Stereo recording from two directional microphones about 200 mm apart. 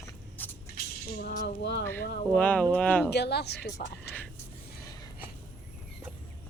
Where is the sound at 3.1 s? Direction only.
55° left (ahead or behind).